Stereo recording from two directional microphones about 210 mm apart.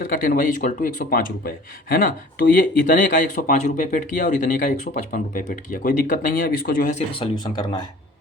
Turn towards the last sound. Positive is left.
turn(degrees=20)  # may be behind; listen again after turning